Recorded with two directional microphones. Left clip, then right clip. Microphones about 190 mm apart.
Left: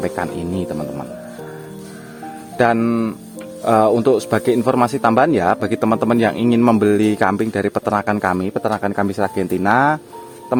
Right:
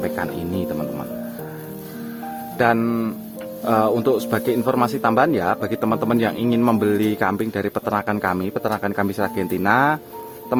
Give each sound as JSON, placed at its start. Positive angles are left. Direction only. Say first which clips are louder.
{"t": 0.0, "sound": "speech", "louder": "left 2 dB", "side_deg": 30}
{"t": 2.6, "sound": "a man's voice", "louder": "left 3 dB", "side_deg": 30}